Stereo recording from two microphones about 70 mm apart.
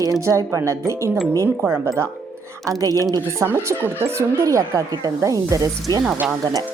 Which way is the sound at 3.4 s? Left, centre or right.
Right.